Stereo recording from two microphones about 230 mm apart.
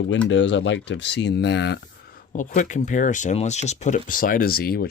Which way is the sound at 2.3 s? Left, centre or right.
Left.